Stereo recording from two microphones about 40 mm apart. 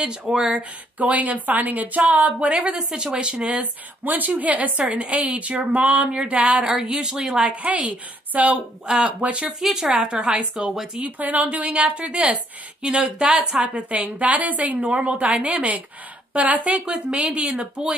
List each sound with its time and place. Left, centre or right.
0.0 s a woman's voice: right
1.0 s a woman's voice: right
2.7 s a woman's voice: right
4.0 s a woman's voice: right
6.6 s a woman's voice: centre; by 8.5 s right
8.8 s a woman's voice: centre
9.2 s a woman's voice: right
9.8 s a woman's voice: right
11.0 s a woman's voice: right